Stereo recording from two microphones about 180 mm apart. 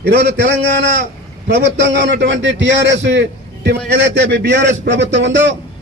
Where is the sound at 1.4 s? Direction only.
70° right (ahead or behind).